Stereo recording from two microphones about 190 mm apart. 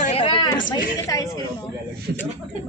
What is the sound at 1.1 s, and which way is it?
Speech, 15° left (ahead or behind).